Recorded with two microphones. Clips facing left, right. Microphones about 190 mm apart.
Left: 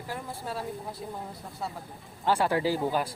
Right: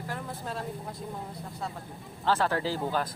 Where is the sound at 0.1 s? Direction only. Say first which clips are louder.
Left 2 dB; 10° left (ahead or behind).